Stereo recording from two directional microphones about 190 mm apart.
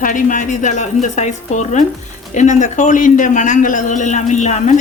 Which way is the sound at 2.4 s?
40° left (ahead or behind).